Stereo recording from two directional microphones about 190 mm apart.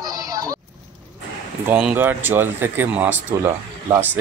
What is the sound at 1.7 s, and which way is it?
Speech, 10° right (ahead or behind).